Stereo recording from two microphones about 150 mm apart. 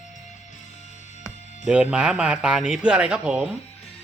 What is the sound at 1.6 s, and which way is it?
A woman's voice, 5° right (ahead or behind).